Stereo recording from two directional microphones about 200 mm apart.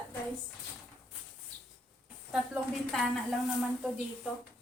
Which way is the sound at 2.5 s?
Centre (ahead or behind).